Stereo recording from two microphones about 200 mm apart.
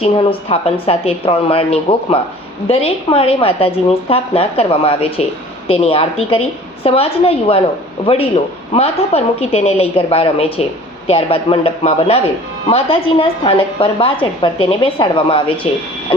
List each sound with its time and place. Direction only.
0.0 s a woman's voice: 30° left (ahead or behind)